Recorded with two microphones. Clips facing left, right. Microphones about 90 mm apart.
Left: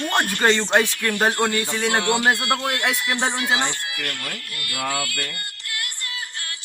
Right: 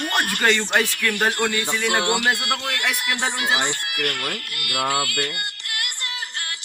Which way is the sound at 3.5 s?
15° right (ahead or behind).